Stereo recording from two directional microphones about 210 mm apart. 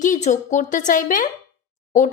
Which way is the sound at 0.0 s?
35° left (ahead or behind).